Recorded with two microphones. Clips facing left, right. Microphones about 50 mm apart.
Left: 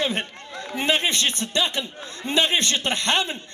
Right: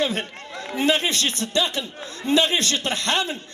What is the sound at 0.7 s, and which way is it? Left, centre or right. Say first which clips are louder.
A man's voice: right 1 dB; left.